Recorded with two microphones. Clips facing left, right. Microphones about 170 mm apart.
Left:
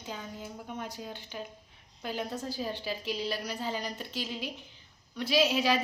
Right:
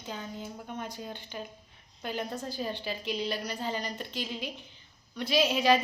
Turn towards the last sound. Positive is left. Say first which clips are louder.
# right 2 dB
turn(degrees=5)  # may be behind; listen again after turning